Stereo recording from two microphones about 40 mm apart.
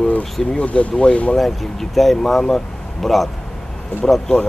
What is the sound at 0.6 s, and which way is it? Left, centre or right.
Speech, left.